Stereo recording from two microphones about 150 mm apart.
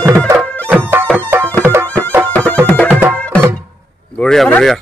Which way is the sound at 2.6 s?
10° left (ahead or behind).